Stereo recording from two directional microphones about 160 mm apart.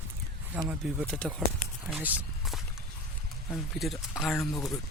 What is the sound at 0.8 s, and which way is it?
Speech, centre (ahead or behind).